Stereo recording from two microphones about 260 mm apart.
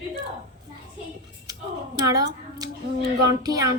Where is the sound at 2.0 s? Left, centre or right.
Centre.